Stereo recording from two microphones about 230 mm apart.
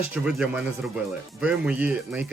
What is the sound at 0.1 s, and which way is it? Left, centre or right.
Speech, centre.